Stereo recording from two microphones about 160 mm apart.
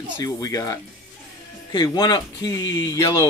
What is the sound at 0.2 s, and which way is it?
Speech, 20° left (ahead or behind).